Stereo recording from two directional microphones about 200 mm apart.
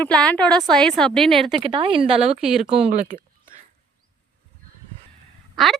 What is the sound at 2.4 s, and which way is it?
Speech, centre (ahead or behind).